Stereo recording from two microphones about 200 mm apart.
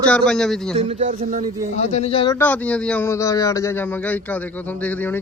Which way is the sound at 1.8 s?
30° left (ahead or behind).